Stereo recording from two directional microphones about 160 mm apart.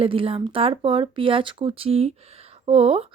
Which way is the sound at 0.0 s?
35° right (ahead or behind).